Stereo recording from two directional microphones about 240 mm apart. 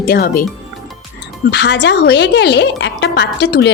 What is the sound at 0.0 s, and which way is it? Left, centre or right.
Speech, left.